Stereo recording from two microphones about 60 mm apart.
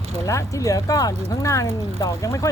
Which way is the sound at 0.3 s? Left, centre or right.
Left.